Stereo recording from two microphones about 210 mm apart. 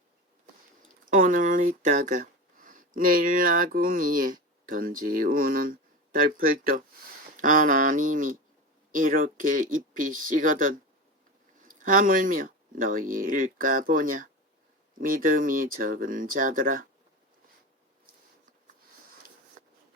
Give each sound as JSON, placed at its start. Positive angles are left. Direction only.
{"t": 1.1, "sound": "speech", "side_deg": -40}